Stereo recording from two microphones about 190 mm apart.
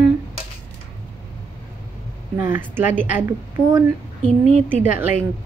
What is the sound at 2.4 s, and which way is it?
Speech, 10° right (ahead or behind).